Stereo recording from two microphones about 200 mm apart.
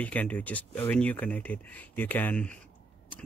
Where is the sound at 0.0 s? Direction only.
5° left (ahead or behind).